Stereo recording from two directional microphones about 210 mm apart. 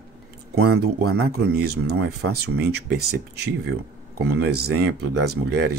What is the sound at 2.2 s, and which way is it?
Speech, 90° right.